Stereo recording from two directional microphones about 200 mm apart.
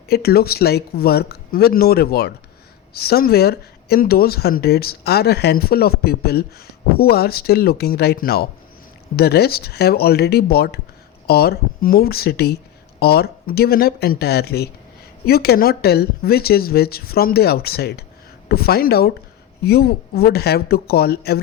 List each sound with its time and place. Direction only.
0.1 s speech: 50° left (ahead or behind)